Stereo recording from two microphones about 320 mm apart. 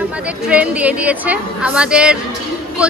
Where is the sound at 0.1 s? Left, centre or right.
Centre.